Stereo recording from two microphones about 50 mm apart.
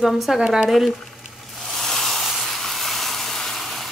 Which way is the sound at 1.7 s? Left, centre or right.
Centre.